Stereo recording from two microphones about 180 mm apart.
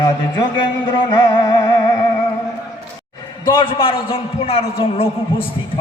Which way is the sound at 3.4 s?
25° left (ahead or behind).